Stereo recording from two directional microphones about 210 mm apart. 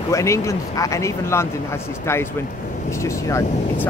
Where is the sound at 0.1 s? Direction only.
15° left (ahead or behind).